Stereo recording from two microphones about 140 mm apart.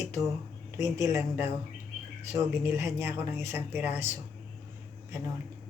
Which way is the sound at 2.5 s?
20° right (ahead or behind).